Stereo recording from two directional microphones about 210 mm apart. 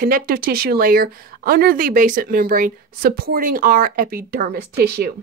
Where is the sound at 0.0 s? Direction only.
45° right (ahead or behind).